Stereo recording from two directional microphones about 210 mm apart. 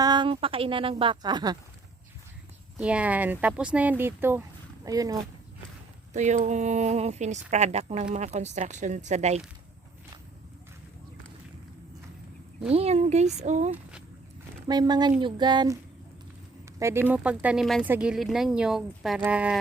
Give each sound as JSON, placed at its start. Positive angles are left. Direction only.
{"t": 0.0, "sound": "speech", "side_deg": -20}
{"t": 2.7, "sound": "speech", "side_deg": -5}
{"t": 6.1, "sound": "speech", "side_deg": -35}
{"t": 12.7, "sound": "speech", "side_deg": -30}
{"t": 14.7, "sound": "speech", "side_deg": -20}
{"t": 17.1, "sound": "speech", "side_deg": -5}